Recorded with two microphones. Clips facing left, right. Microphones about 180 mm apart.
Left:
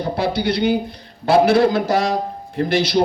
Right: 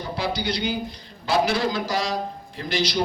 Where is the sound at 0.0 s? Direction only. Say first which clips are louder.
Left 7 dB; 60° left (ahead or behind).